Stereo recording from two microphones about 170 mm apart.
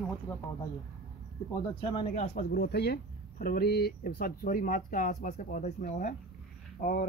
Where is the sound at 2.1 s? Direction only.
50° left (ahead or behind).